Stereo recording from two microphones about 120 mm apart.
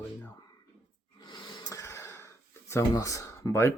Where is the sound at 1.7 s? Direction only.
20° left (ahead or behind).